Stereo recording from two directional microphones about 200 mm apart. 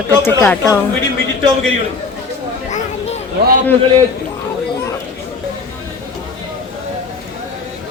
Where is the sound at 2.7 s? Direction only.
35° left (ahead or behind).